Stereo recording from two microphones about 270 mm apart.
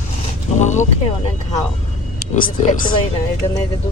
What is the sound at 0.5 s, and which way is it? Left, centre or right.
Speech, left.